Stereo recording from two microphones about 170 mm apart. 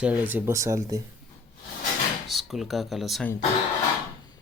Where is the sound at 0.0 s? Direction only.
10° right (ahead or behind).